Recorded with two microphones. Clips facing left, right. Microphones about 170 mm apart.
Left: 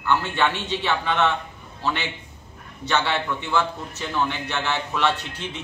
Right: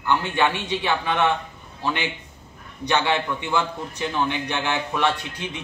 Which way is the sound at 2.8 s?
15° right (ahead or behind).